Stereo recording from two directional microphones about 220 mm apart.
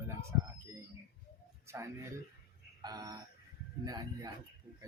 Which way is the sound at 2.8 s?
20° right (ahead or behind).